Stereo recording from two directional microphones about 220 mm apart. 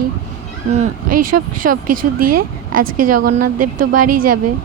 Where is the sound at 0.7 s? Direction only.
35° right (ahead or behind).